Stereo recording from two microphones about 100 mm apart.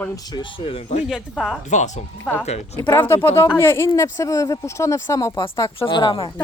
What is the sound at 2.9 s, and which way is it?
A woman's voice, 25° left (ahead or behind).